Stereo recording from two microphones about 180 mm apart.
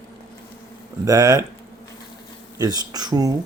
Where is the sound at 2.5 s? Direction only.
20° right (ahead or behind).